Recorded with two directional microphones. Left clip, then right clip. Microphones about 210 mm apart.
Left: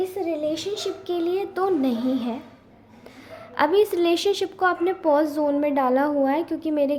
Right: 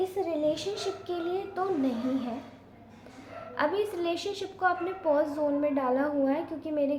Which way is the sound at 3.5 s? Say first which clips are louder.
Left 9 dB; 45° left (ahead or behind).